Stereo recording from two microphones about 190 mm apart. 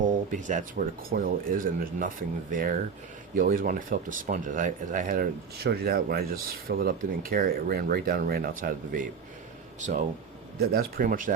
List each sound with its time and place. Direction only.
0.0 s speech: 40° right (ahead or behind)
10.6 s speech: 50° right (ahead or behind)